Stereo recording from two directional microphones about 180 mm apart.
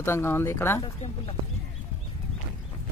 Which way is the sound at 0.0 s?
15° left (ahead or behind).